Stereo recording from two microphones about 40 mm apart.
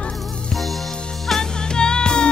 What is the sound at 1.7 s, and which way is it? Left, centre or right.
Music, centre.